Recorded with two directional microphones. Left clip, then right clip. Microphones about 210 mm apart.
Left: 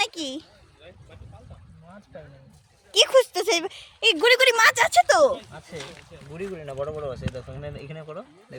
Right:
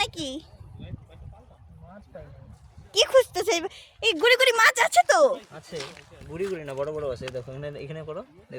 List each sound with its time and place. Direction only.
0.0 s speech: centre (ahead or behind)
2.9 s speech: 5° left (ahead or behind)
5.5 s speech: 35° right (ahead or behind)
6.3 s speech: 50° right (ahead or behind); by 8.5 s 30° right (ahead or behind)